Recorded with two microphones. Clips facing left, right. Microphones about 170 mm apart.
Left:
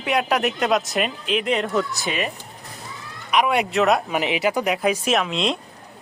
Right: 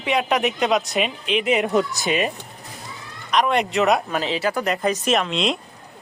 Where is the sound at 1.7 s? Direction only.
20° right (ahead or behind).